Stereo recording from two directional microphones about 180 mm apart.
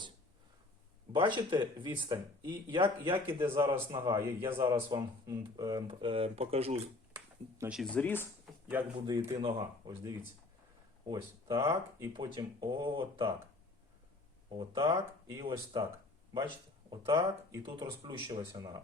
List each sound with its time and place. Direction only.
1.1 s speech: 25° right (ahead or behind)
3.7 s speech: 30° right (ahead or behind)
7.7 s speech: 5° left (ahead or behind)
8.7 s speech: 15° right (ahead or behind)
9.3 s speech: 30° right (ahead or behind)
14.5 s speech: 25° right (ahead or behind)
16.3 s a sound: 25° right (ahead or behind)
17.0 s speech: 20° right (ahead or behind)